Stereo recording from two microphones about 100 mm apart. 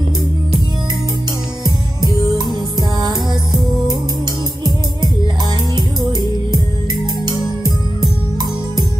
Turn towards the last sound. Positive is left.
turn(degrees=-45)  # may be behind; listen again after turning